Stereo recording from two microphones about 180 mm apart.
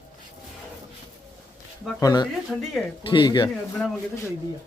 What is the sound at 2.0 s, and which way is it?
Speech, 20° left (ahead or behind).